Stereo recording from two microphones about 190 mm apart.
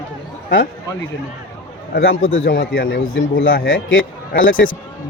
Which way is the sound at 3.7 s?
90° left.